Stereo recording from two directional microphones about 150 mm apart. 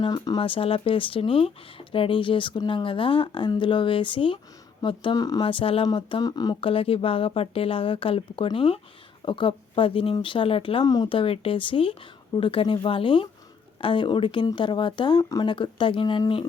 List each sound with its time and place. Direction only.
0.0 s speech: 30° left (ahead or behind)